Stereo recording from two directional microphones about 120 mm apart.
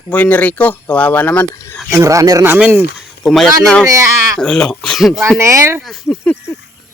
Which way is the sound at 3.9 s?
25° right (ahead or behind).